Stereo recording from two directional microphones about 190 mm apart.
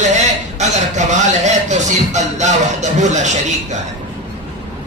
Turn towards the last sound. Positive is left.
turn(degrees=-40)  # may be behind; listen again after turning